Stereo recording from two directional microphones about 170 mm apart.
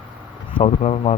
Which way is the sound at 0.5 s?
40° left (ahead or behind).